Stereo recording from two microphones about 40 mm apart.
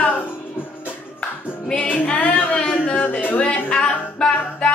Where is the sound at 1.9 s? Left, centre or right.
Left.